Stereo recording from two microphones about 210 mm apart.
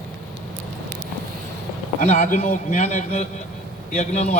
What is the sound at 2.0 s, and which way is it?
A man's voice, 35° left (ahead or behind).